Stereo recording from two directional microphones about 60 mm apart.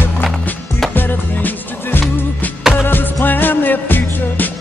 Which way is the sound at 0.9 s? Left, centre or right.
Left.